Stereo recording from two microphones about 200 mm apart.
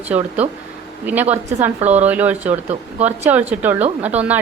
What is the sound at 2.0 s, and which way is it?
A woman's voice, 10° right (ahead or behind).